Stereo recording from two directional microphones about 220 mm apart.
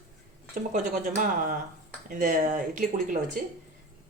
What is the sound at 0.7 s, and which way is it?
Speech, 40° right (ahead or behind).